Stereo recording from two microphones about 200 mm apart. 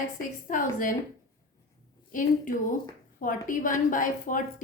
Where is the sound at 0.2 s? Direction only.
40° left (ahead or behind).